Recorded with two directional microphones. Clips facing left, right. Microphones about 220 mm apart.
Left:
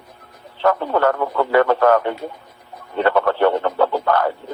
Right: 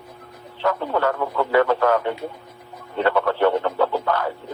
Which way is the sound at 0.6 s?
65° left (ahead or behind).